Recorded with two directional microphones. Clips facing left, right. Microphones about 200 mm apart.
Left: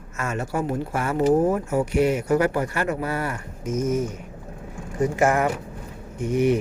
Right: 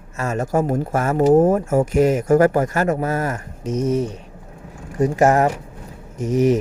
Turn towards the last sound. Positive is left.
turn(degrees=-40)  # may be behind; listen again after turning